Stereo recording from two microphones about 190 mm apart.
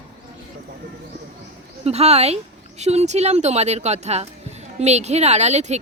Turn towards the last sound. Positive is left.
turn(degrees=-35)  # may be behind; listen again after turning